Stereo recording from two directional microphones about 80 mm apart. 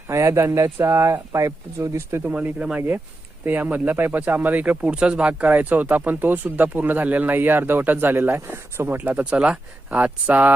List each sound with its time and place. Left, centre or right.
0.1 s speech: right
2.2 s speech: centre
9.0 s speech: centre